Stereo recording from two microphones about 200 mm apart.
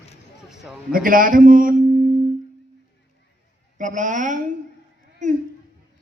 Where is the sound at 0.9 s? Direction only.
45° right (ahead or behind).